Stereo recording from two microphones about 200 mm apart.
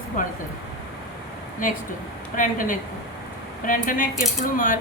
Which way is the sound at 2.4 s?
40° left (ahead or behind).